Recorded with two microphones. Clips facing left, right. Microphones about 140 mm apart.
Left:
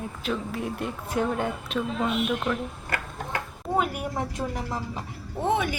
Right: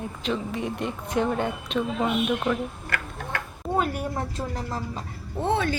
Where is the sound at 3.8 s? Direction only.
10° left (ahead or behind).